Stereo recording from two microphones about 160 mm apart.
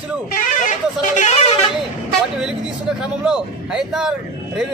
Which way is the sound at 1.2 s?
45° left (ahead or behind).